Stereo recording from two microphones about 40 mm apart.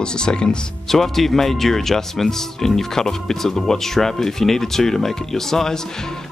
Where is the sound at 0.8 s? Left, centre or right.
Centre.